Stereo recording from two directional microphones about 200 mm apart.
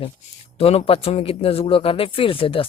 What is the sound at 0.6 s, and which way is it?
Speech, 30° left (ahead or behind).